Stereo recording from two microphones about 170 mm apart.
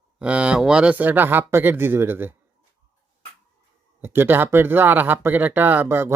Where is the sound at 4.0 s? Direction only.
10° right (ahead or behind).